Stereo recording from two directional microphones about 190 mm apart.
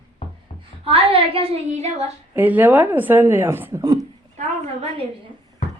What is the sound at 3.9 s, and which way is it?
A woman's voice, 35° right (ahead or behind).